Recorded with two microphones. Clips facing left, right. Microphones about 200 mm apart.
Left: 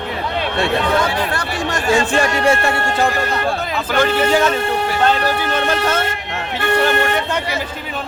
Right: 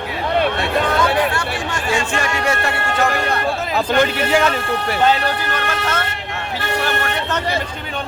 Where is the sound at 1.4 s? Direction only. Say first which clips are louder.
Left 2 dB; 35° left (ahead or behind).